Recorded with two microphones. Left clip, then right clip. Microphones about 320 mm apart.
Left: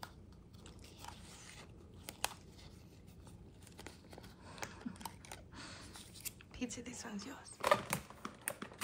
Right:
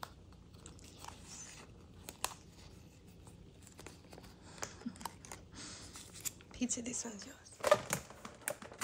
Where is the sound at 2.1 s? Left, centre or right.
Centre.